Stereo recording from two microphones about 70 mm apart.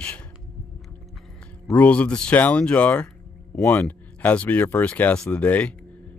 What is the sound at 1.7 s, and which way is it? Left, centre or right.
Speech, left.